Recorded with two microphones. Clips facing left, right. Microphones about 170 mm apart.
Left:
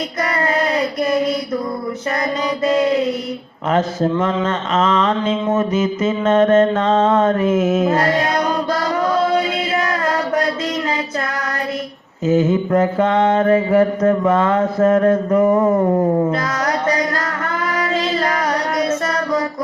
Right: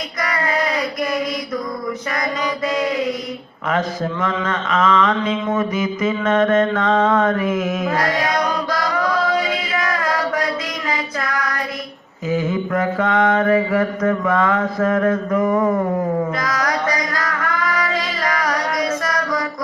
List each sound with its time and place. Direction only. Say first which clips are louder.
0.2 s child singing: left 2 dB; 30° left (ahead or behind)
2.6 s chant: left 6 dB; 30° left (ahead or behind)
3.7 s mantra: left 4 dB; 30° left (ahead or behind)
11.3 s child singing: right 1 dB; 30° left (ahead or behind)
12.2 s mantra: left 5 dB; 25° left (ahead or behind)